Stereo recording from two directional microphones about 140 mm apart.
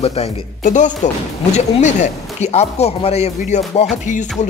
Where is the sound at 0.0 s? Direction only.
45° left (ahead or behind).